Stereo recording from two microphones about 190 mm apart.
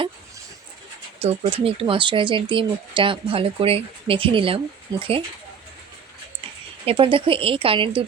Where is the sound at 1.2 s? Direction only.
30° right (ahead or behind).